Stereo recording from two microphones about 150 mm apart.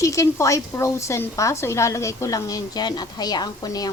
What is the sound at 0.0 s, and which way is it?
A woman's voice, 20° left (ahead or behind).